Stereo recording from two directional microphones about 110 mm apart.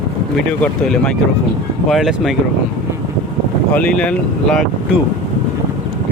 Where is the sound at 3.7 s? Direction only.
10° left (ahead or behind).